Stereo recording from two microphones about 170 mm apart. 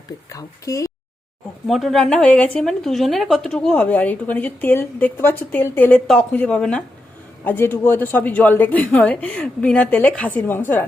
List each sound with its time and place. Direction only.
0.3 s speech: 20° left (ahead or behind)
1.6 s a woman's voice: centre (ahead or behind)